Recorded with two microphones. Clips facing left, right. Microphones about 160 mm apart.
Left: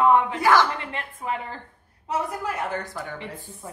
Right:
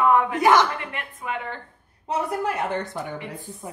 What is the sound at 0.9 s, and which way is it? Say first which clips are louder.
Speech: left 2 dB; 30° left (ahead or behind).